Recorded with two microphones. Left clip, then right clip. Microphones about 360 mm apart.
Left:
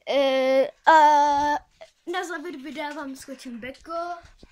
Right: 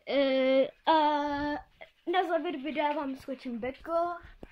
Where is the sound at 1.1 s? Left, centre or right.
Centre.